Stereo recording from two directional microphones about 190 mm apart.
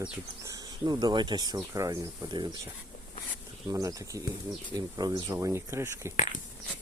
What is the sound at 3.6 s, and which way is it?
Speech, 20° right (ahead or behind).